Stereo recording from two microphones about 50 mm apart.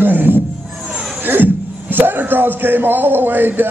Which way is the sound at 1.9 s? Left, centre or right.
Right.